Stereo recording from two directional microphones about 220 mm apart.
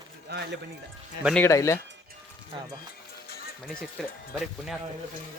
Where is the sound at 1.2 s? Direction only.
5° left (ahead or behind).